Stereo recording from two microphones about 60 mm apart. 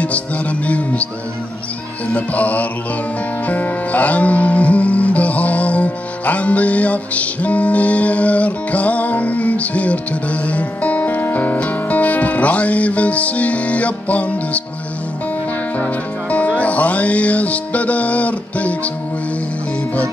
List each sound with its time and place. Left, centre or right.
0.0 s music: left
2.1 s music: left
15.8 s music: left